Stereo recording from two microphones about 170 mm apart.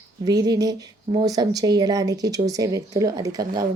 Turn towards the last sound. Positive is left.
turn(degrees=-20)  # may be behind; listen again after turning